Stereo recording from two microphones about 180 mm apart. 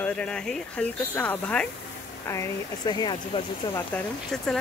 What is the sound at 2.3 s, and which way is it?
Speech, 20° left (ahead or behind).